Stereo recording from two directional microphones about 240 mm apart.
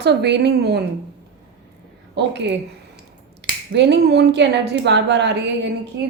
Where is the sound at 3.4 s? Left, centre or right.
Right.